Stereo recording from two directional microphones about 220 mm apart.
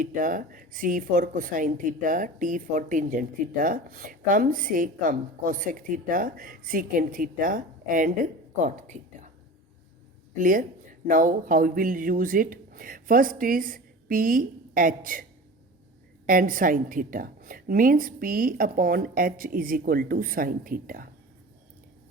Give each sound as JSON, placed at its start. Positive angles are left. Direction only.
{"t": 0.0, "sound": "speech", "side_deg": -35}
{"t": 10.3, "sound": "speech", "side_deg": -35}
{"t": 16.2, "sound": "speech", "side_deg": -40}